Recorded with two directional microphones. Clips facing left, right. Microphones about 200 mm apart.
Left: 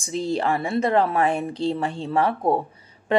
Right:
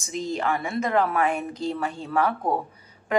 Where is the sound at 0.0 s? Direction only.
30° left (ahead or behind).